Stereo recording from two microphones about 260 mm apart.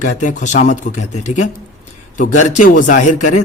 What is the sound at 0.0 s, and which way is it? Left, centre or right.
A man's voice, left.